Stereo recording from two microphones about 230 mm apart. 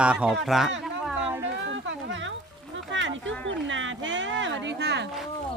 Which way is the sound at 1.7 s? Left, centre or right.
Right.